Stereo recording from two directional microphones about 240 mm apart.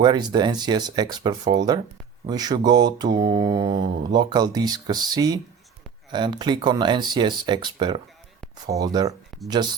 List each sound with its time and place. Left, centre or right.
0.0 s mantra: centre
6.1 s speech: centre
8.6 s mantra: centre